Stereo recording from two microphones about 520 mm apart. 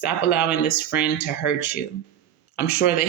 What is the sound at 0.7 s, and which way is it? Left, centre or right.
Speech, centre.